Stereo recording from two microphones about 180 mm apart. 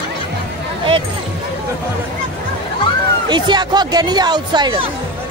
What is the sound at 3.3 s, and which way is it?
Speech, 25° right (ahead or behind).